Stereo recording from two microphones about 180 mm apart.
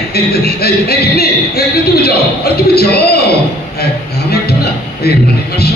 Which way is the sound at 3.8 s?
60° left (ahead or behind).